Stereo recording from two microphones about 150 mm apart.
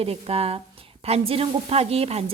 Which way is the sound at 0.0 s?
40° right (ahead or behind).